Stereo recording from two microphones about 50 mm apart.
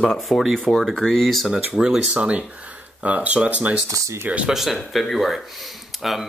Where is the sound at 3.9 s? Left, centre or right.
Right.